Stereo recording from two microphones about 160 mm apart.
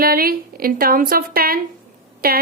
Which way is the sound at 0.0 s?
65° right (ahead or behind).